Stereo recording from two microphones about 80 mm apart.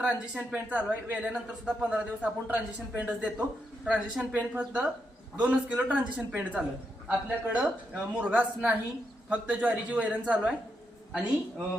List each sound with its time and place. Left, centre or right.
0.0 s a woman's voice: centre